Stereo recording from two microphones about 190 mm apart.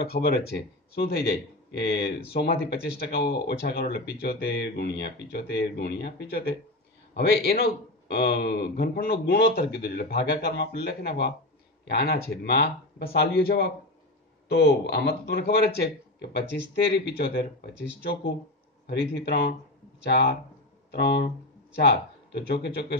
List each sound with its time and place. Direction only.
0.1 s speech: 55° left (ahead or behind)
18.9 s speech: 60° left (ahead or behind)